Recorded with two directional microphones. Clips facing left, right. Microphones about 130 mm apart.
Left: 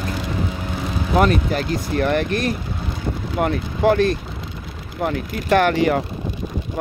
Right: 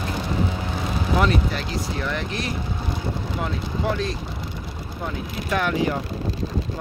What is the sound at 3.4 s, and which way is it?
Speech, 65° left (ahead or behind).